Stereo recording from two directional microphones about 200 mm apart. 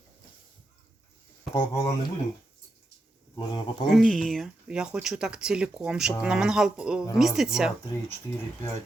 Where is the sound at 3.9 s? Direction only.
Centre (ahead or behind).